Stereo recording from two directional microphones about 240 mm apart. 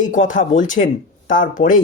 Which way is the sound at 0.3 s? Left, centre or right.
Left.